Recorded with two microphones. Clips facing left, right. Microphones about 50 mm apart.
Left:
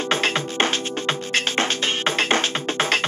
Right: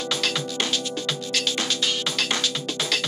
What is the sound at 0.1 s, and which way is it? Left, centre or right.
Music, left.